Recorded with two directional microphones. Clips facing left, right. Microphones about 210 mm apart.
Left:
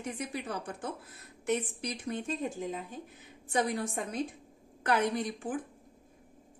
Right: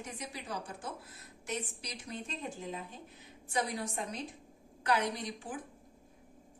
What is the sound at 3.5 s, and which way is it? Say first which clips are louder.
A woman's voice: left 5 dB; 55° left (ahead or behind).